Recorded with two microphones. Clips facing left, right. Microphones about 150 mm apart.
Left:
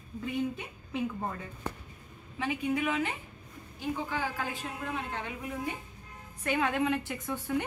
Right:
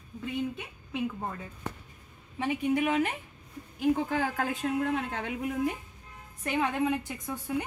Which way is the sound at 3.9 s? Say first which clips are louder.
Right 5 dB; 55° right (ahead or behind).